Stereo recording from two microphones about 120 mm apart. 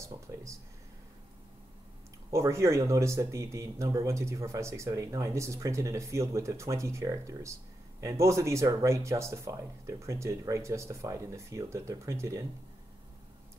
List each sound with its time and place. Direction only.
0.0 s speech: 25° right (ahead or behind)
2.3 s speech: 25° right (ahead or behind)